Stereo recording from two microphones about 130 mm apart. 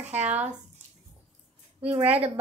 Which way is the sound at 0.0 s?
60° right (ahead or behind).